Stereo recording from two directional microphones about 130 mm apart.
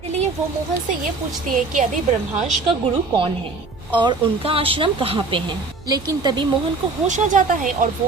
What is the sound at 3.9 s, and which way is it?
Speech, 35° right (ahead or behind).